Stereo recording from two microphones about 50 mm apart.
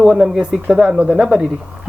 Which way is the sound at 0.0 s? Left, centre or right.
Centre.